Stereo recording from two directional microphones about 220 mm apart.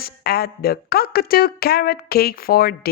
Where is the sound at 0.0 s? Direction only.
45° left (ahead or behind).